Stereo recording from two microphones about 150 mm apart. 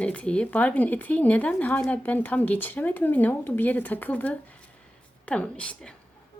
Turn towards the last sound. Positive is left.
turn(degrees=5)  # may be behind; listen again after turning